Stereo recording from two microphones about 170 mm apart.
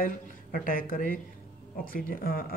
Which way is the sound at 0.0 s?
55° left (ahead or behind).